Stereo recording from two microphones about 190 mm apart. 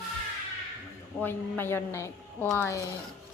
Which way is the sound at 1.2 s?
10° left (ahead or behind).